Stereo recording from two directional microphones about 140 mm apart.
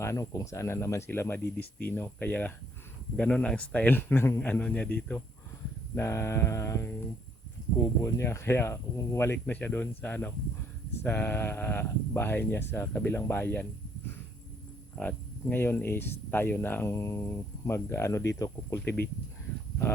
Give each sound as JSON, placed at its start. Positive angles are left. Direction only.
{"t": 0.0, "sound": "speech", "side_deg": 20}
{"t": 5.9, "sound": "mantra", "side_deg": 20}
{"t": 8.0, "sound": "speech", "side_deg": 20}
{"t": 14.9, "sound": "speech", "side_deg": 10}